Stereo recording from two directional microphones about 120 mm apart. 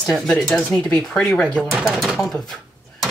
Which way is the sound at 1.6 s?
Centre (ahead or behind).